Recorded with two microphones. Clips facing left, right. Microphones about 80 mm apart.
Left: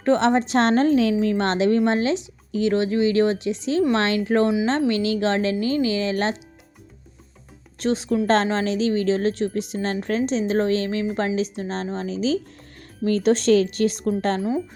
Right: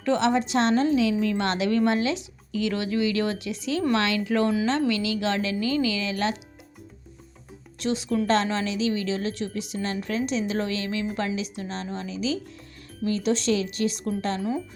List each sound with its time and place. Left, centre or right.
0.0 s a woman's voice: left
1.2 s a woman's voice: left
7.8 s a woman's voice: left